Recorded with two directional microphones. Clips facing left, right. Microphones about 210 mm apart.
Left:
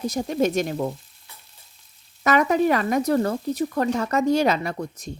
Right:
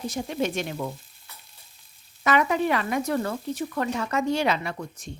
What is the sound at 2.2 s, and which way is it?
Frying, 40° left (ahead or behind).